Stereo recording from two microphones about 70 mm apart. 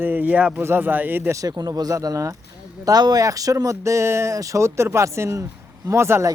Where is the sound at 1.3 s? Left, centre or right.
Right.